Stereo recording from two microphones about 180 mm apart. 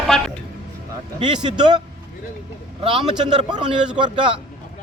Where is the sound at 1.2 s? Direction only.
25° right (ahead or behind).